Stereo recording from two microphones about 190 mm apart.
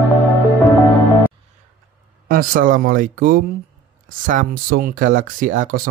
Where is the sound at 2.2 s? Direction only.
50° right (ahead or behind).